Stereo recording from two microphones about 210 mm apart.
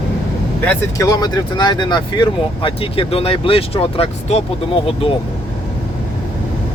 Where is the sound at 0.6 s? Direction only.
10° left (ahead or behind); by 4.4 s 30° left (ahead or behind).